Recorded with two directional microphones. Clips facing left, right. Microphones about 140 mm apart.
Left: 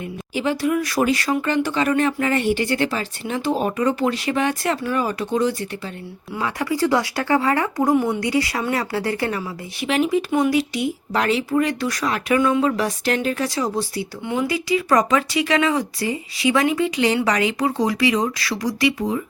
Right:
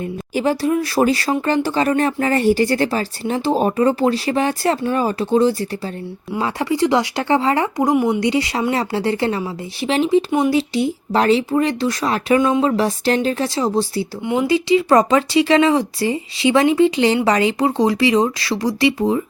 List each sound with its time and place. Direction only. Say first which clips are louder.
0.0 s speech: right 4 dB; 40° right (ahead or behind)